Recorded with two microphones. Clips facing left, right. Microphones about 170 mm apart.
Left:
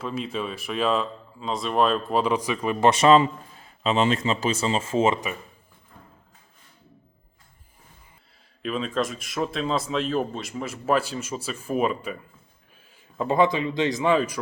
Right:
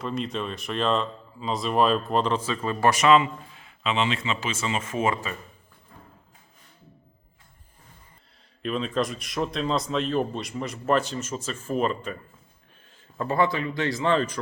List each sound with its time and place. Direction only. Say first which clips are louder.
0.0 s speech: even; 5° left (ahead or behind)
2.9 s a man's voice: left 2 dB; 30° left (ahead or behind)
8.6 s a man's voice: even; centre (ahead or behind)